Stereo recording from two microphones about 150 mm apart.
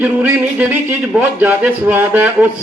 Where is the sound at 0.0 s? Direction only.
10° right (ahead or behind).